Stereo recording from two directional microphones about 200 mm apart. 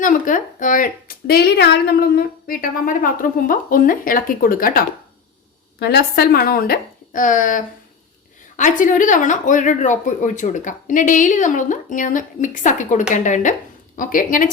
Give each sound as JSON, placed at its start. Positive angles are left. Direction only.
{"t": 0.0, "sound": "a woman's voice", "side_deg": 40}